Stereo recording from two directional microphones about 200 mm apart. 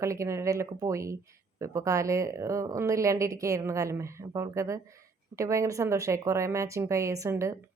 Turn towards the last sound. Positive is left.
turn(degrees=-15)  # may be behind; listen again after turning